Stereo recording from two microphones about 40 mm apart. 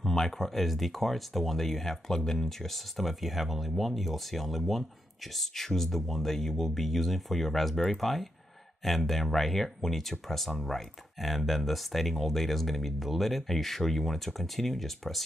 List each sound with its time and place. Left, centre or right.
0.0 s speech: centre